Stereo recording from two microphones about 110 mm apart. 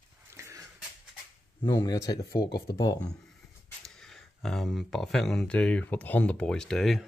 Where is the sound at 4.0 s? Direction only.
5° left (ahead or behind).